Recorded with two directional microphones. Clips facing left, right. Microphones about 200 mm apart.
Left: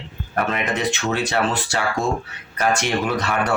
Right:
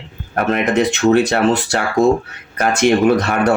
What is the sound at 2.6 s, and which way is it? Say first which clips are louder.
Speech: right 8 dB; 45° right (ahead or behind).